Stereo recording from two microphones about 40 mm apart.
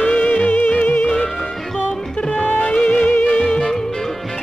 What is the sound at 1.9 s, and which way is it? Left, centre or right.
Music, left.